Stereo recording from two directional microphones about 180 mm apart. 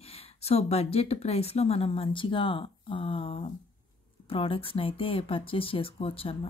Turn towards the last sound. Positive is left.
turn(degrees=30)  # may be behind; listen again after turning